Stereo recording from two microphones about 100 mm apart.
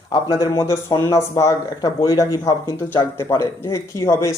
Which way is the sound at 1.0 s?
30° left (ahead or behind).